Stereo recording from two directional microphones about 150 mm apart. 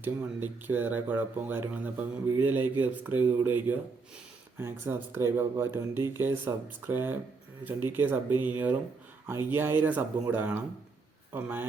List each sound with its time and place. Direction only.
0.0 s speech: 15° right (ahead or behind)